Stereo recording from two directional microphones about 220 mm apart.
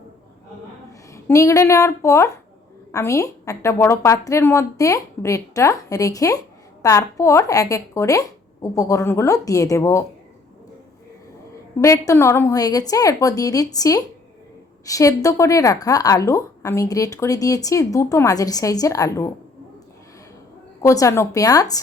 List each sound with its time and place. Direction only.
1.1 s speech: 15° left (ahead or behind)
11.8 s speech: 15° left (ahead or behind)
20.8 s speech: 15° left (ahead or behind)